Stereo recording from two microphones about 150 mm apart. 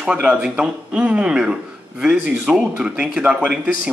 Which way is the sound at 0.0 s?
5° right (ahead or behind).